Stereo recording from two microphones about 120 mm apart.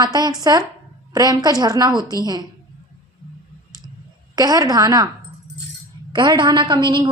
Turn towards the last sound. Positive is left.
turn(degrees=-45)  # may be behind; listen again after turning